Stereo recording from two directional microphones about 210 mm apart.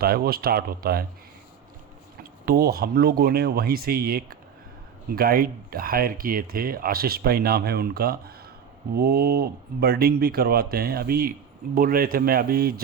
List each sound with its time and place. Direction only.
0.0 s speech: 45° right (ahead or behind)
2.5 s speech: 45° right (ahead or behind)